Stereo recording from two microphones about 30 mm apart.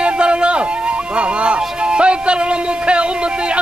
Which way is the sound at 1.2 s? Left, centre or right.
Right.